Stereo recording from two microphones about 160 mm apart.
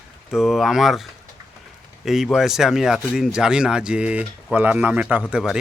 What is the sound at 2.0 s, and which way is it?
Speech, centre (ahead or behind).